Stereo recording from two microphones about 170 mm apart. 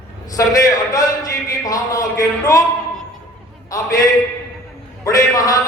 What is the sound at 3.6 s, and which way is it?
A man's voice, 20° left (ahead or behind).